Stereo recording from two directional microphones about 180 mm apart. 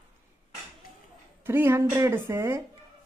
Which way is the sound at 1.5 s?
15° right (ahead or behind).